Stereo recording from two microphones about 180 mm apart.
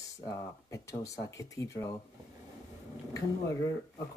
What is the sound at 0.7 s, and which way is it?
Speech, 15° left (ahead or behind).